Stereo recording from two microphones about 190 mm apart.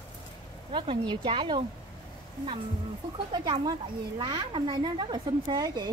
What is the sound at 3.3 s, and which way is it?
Speech, 25° right (ahead or behind).